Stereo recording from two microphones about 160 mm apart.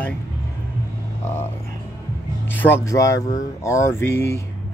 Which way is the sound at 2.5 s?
10° left (ahead or behind).